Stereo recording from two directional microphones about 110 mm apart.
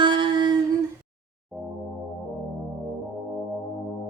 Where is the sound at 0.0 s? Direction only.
45° right (ahead or behind).